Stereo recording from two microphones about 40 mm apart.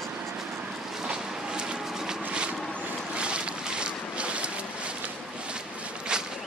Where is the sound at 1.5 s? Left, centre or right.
Centre.